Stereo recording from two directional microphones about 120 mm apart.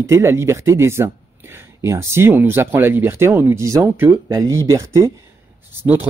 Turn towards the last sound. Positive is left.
turn(degrees=-15)  # may be behind; listen again after turning